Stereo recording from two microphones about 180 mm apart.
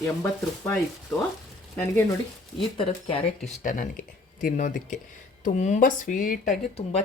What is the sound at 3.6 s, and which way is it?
Speech, 45° left (ahead or behind).